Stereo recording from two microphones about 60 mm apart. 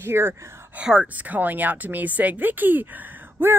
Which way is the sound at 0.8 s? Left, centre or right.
Centre.